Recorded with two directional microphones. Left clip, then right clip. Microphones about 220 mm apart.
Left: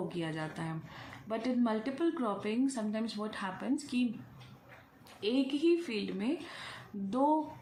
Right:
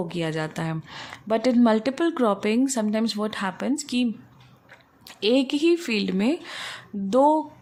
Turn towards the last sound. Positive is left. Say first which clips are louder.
# right 13 dB
turn(degrees=-50)  # may be behind; listen again after turning